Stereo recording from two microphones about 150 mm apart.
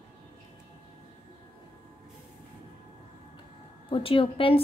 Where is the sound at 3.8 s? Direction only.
35° left (ahead or behind).